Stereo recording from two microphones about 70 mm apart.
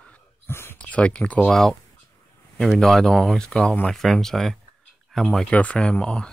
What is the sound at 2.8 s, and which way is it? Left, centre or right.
Speech, centre.